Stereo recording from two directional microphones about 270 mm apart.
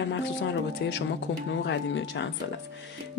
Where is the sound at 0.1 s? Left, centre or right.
Left.